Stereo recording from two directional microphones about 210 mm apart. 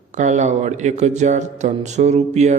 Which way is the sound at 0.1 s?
35° right (ahead or behind).